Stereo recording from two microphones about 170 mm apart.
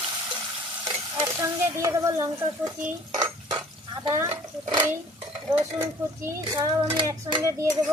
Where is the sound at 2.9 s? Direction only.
20° right (ahead or behind).